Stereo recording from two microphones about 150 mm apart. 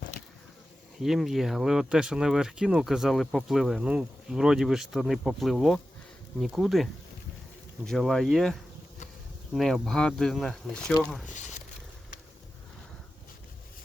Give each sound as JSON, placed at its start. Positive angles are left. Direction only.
{"t": 1.0, "sound": "speech", "side_deg": 0}
{"t": 7.9, "sound": "speech", "side_deg": 5}
{"t": 9.6, "sound": "speech", "side_deg": 0}
{"t": 11.3, "sound": "a sound", "side_deg": 50}